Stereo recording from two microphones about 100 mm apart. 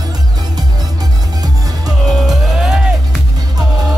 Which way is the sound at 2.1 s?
Centre (ahead or behind).